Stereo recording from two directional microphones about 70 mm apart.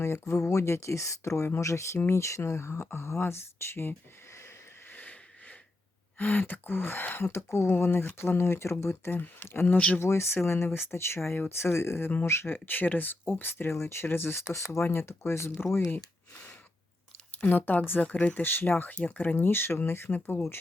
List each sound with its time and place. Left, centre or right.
0.0 s speech: left
4.9 s a sound: left
6.1 s speech: left
9.7 s speech: centre
10.0 s speech: left
16.3 s a sound: centre
17.4 s speech: left